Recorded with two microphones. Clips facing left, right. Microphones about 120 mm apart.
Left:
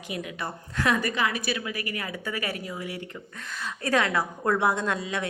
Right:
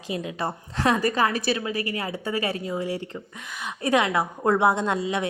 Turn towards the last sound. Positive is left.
turn(degrees=-25)  # may be behind; listen again after turning